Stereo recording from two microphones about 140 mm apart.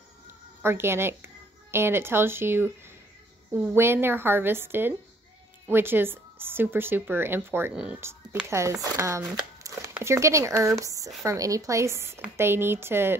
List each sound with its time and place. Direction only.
0.6 s a woman's voice: 15° right (ahead or behind)